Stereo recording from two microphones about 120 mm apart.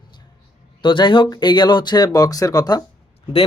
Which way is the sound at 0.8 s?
40° left (ahead or behind).